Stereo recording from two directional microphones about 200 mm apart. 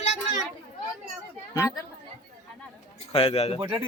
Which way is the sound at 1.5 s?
15° left (ahead or behind).